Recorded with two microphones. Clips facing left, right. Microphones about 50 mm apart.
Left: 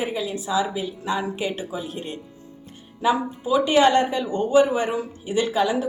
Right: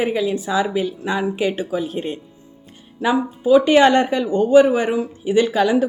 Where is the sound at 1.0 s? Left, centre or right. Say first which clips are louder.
Right 2 dB; right.